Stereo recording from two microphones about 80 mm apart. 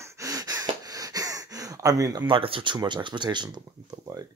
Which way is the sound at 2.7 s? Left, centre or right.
Right.